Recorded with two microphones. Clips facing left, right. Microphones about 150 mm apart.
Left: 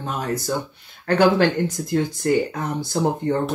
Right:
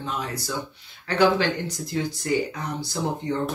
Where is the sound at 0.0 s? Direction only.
50° left (ahead or behind).